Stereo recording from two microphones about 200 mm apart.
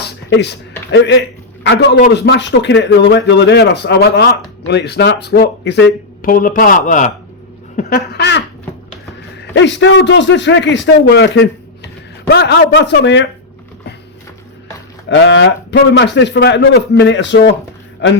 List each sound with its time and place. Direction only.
0.0 s a sound: 60° left (ahead or behind)
0.9 s a man's voice: 60° left (ahead or behind); by 7.1 s 40° left (ahead or behind)
7.8 s a man's voice: 50° left (ahead or behind)
15.1 s a man's voice: 65° left (ahead or behind)